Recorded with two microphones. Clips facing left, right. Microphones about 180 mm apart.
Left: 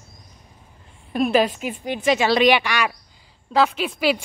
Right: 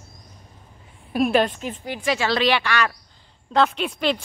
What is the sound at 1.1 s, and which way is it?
A woman's voice, centre (ahead or behind).